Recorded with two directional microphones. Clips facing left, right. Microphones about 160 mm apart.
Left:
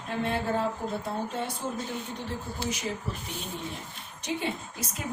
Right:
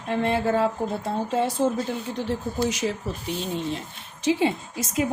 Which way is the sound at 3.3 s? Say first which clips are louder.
Right 9 dB; 90° right.